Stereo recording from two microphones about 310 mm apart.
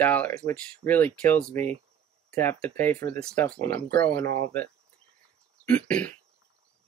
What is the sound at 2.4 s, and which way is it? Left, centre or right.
Speech, centre.